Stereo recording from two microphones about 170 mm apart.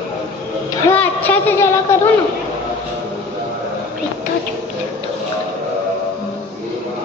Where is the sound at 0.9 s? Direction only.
10° left (ahead or behind).